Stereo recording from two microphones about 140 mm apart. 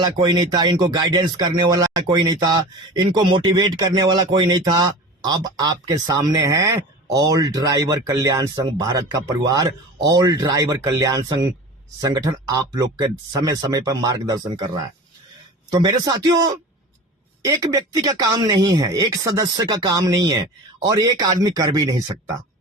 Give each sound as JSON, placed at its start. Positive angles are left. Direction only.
{"t": 0.0, "sound": "speech", "side_deg": -30}